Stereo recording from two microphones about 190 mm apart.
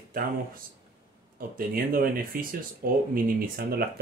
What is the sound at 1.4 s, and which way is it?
Speech, 50° right (ahead or behind).